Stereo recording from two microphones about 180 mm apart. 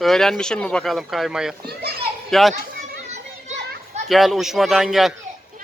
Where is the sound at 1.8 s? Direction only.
60° right (ahead or behind).